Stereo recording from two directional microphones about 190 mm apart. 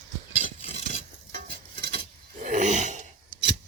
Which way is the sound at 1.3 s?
50° right (ahead or behind).